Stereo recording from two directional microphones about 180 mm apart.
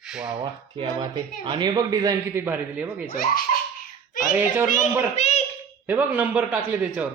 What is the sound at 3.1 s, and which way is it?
Speech, 50° left (ahead or behind).